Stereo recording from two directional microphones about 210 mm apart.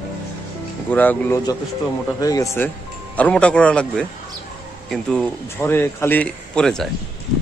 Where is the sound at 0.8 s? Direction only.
10° left (ahead or behind).